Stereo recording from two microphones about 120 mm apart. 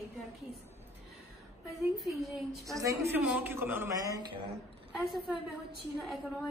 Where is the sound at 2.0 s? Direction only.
Centre (ahead or behind).